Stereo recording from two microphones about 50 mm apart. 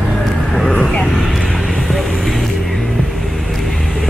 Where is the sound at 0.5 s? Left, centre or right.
Centre.